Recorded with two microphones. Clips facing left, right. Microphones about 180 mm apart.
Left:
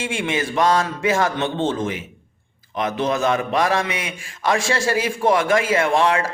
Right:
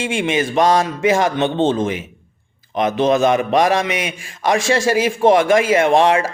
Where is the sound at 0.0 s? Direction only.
20° right (ahead or behind).